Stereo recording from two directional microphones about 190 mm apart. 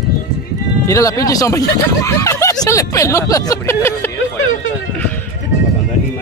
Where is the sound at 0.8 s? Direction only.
15° left (ahead or behind).